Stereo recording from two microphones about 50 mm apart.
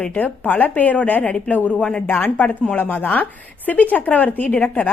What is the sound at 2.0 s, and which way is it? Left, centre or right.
A woman's voice, left.